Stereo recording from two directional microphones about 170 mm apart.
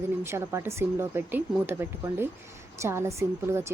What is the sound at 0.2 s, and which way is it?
Speech, 15° right (ahead or behind).